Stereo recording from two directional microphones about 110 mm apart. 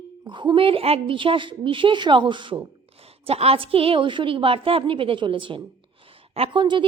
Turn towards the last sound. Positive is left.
turn(degrees=-45)  # may be behind; listen again after turning